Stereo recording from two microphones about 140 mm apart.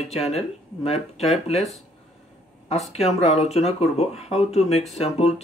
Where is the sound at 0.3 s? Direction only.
45° left (ahead or behind).